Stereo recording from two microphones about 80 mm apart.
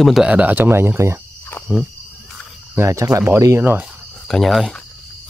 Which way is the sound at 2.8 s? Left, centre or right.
Right.